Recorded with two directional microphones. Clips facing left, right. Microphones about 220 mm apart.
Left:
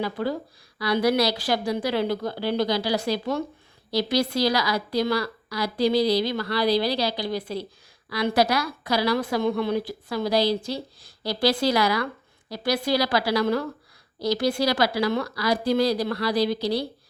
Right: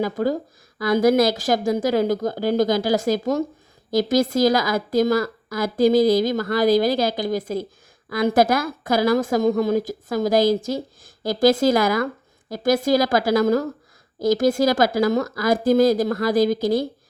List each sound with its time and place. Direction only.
0.0 s a woman's voice: 45° right (ahead or behind)